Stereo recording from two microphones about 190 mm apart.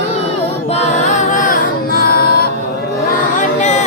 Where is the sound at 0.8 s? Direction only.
40° left (ahead or behind).